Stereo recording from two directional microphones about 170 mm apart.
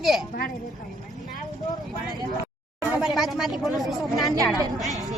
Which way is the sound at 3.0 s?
Centre (ahead or behind).